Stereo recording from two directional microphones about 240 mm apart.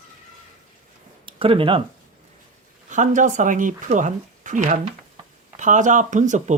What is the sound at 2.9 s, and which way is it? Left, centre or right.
Speech, right.